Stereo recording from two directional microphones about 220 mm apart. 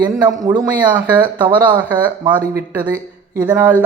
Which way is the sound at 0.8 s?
5° right (ahead or behind).